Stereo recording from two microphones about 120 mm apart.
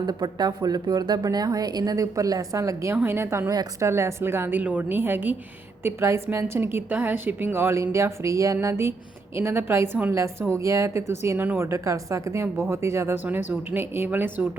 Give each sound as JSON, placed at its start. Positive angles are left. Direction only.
{"t": 0.0, "sound": "a woman's voice", "side_deg": -35}
{"t": 3.5, "sound": "a woman's voice", "side_deg": -35}
{"t": 3.8, "sound": "a woman's voice", "side_deg": -20}